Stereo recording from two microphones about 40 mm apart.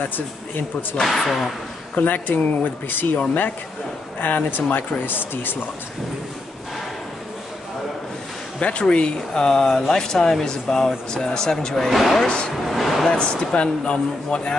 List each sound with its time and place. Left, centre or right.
1.0 s speech: centre
2.0 s speech: left
4.2 s speech: left
8.5 s speech: left; by 12.3 s centre
12.6 s a sound: centre
13.1 s a man's voice: left